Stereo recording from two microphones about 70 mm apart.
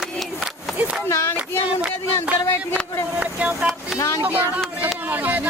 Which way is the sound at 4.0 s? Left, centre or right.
Left.